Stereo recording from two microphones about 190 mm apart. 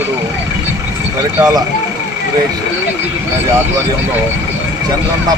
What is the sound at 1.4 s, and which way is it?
Speech, 20° right (ahead or behind).